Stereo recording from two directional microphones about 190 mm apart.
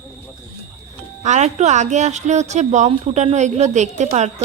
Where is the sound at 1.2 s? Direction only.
35° right (ahead or behind).